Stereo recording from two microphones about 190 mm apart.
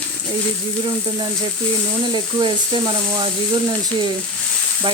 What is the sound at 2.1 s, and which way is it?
Speech, 20° right (ahead or behind).